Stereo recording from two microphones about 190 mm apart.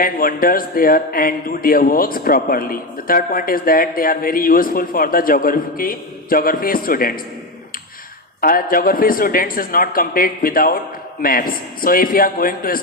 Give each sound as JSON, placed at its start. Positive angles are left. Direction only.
{"t": 0.0, "sound": "a man's voice", "side_deg": 50}
{"t": 8.4, "sound": "a man's voice", "side_deg": 50}